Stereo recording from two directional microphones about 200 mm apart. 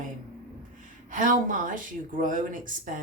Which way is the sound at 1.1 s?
40° right (ahead or behind).